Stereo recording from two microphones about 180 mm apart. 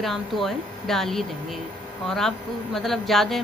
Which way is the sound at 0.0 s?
Centre (ahead or behind).